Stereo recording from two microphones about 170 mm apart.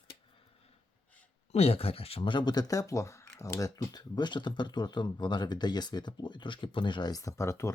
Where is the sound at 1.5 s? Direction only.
35° left (ahead or behind).